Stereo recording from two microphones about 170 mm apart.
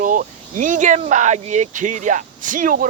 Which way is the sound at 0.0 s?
50° right (ahead or behind).